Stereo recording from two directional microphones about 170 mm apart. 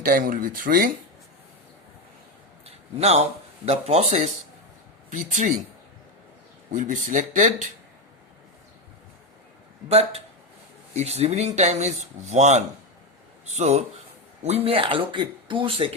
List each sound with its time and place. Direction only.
0.0 s speech: 55° right (ahead or behind)
2.6 s a sound: 40° right (ahead or behind)
3.7 s speech: 40° right (ahead or behind)
6.7 s speech: 50° right (ahead or behind)
9.9 s speech: 40° right (ahead or behind)